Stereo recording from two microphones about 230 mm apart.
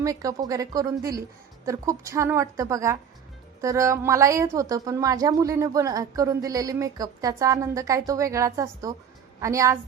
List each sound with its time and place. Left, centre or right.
0.0 s a woman's voice: centre